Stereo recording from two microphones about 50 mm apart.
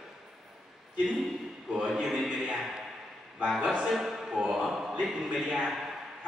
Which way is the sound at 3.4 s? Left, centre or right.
Centre.